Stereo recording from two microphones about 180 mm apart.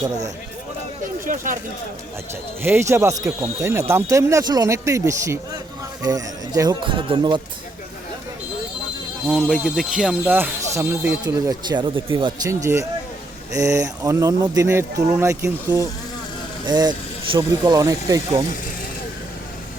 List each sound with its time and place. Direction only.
1.2 s speech: 50° right (ahead or behind)
2.6 s speech: 10° right (ahead or behind)
9.2 s speech: centre (ahead or behind); by 18.3 s 20° right (ahead or behind)